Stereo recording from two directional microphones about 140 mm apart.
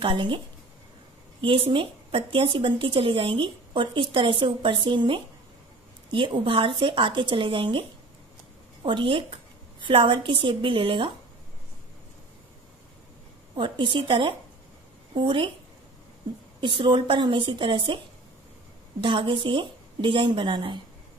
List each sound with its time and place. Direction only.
0.0 s speech: 35° right (ahead or behind)
1.4 s speech: 40° right (ahead or behind)
8.8 s speech: 35° right (ahead or behind)
13.6 s speech: 35° right (ahead or behind)
16.6 s speech: 35° right (ahead or behind)